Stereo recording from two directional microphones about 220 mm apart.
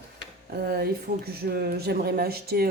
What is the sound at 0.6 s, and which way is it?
Speech, 45° right (ahead or behind).